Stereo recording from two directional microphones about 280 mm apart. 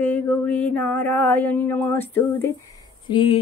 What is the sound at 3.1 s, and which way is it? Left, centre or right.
Music, centre.